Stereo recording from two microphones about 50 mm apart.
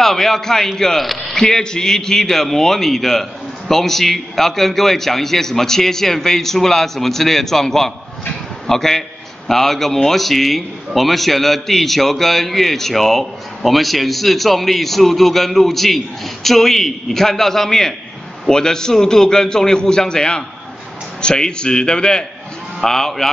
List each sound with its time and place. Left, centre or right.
0.0 s a man's voice: centre